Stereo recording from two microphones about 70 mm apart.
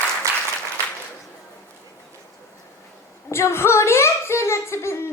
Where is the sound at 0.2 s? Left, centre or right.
Right.